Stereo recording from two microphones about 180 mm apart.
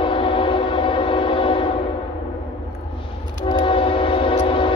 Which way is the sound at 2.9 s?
30° left (ahead or behind).